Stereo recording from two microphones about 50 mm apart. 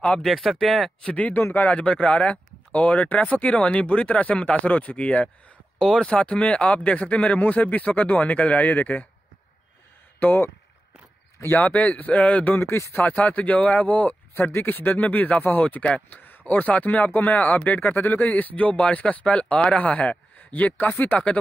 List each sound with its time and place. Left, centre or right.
0.2 s speech: centre
1.0 s speech: left
1.8 s speech: left
5.8 s speech: centre
6.0 s speech: left
10.2 s speech: left
12.5 s speech: left
12.9 s a man's voice: left
20.7 s speech: left